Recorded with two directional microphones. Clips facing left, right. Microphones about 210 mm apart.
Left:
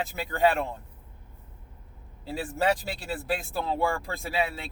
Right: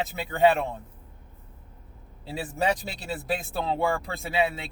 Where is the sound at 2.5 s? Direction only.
15° right (ahead or behind).